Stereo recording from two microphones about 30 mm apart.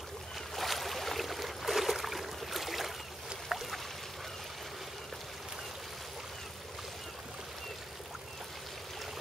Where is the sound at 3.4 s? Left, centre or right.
Centre.